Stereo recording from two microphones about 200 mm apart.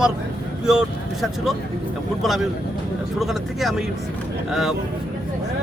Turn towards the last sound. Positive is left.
turn(degrees=0)  # may be behind; listen again after turning